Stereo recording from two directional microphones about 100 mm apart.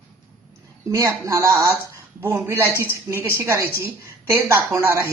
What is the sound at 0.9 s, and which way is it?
Speech, 30° right (ahead or behind).